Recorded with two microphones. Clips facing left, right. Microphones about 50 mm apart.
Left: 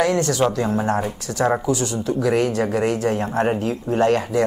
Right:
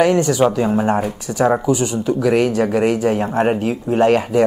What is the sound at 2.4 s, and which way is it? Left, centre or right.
Speech, right.